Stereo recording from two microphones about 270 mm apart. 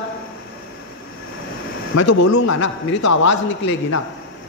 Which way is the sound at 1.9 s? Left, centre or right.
Left.